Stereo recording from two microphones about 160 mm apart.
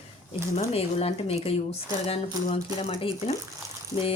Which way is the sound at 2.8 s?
40° left (ahead or behind).